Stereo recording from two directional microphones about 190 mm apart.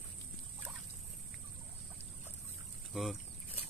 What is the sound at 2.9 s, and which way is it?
Boat, centre (ahead or behind).